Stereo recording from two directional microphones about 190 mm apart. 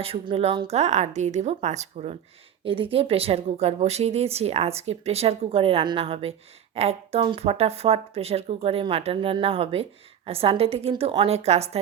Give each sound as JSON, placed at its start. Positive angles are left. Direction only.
{"t": 0.0, "sound": "speech", "side_deg": -30}